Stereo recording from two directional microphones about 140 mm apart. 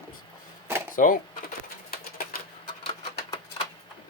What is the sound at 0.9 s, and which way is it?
Speech, 75° left (ahead or behind).